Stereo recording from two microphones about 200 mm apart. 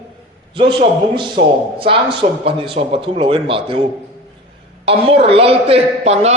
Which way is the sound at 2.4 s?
30° right (ahead or behind).